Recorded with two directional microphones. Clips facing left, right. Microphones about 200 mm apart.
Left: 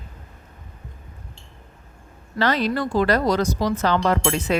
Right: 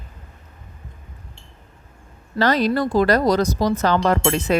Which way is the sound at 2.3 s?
40° right (ahead or behind).